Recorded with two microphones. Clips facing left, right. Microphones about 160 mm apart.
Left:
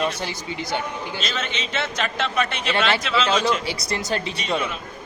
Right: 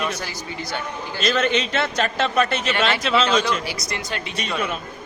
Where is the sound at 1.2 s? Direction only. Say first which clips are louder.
Right 12 dB; 55° right (ahead or behind).